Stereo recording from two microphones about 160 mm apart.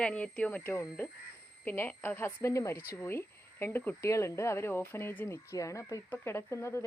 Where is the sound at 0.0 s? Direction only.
5° left (ahead or behind).